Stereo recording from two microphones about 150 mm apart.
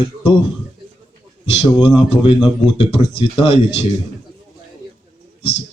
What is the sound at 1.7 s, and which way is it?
Speech, 35° left (ahead or behind).